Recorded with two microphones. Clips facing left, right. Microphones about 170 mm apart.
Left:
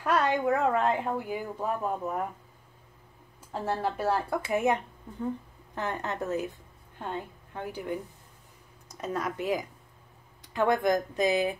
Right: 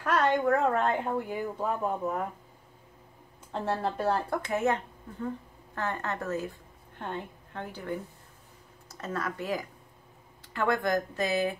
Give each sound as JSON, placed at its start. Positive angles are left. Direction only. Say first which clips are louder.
{"t": 0.0, "sound": "speech", "louder": "even", "side_deg": 10}
{"t": 3.5, "sound": "a woman's voice", "louder": "even", "side_deg": 5}
{"t": 7.5, "sound": "speech", "louder": "left 2 dB", "side_deg": 15}